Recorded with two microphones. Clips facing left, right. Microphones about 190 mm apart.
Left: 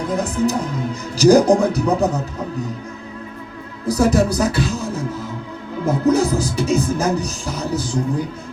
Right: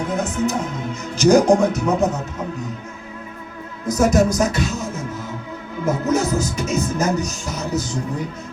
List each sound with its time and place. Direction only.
0.1 s speech: 35° left (ahead or behind)
3.8 s speech: 35° left (ahead or behind)